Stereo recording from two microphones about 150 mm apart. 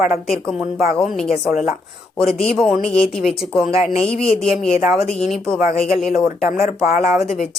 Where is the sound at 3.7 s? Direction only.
45° left (ahead or behind).